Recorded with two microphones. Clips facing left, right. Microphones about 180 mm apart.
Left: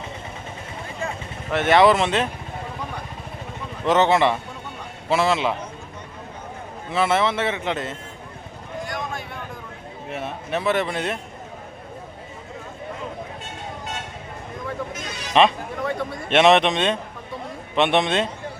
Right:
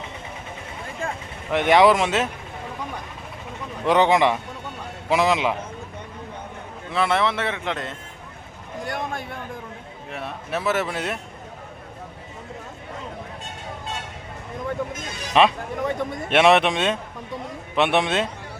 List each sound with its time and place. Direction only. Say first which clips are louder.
1.5 s speech: even; 15° right (ahead or behind)
3.8 s speech: even; 10° right (ahead or behind)
6.9 s speech: left 1 dB; centre (ahead or behind)
10.1 s speech: left 2 dB; centre (ahead or behind)
15.3 s speech: left 1 dB; 5° right (ahead or behind)
15.8 s a man's voice: right 1 dB; 20° right (ahead or behind)
16.3 s speech: left 1 dB; 10° right (ahead or behind)